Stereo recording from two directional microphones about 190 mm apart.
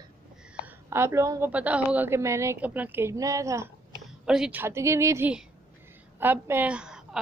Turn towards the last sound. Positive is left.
turn(degrees=-5)  # may be behind; listen again after turning